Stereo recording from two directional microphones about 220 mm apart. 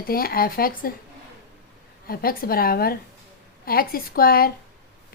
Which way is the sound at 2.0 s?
40° left (ahead or behind).